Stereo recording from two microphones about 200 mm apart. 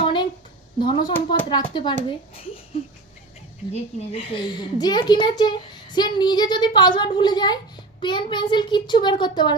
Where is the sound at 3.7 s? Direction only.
25° left (ahead or behind).